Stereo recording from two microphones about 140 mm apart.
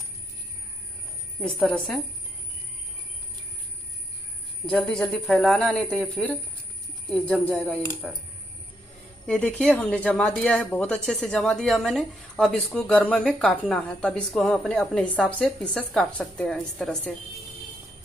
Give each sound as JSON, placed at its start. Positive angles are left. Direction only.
{"t": 1.4, "sound": "speech", "side_deg": 10}
{"t": 4.6, "sound": "speech", "side_deg": 5}
{"t": 9.3, "sound": "speech", "side_deg": 10}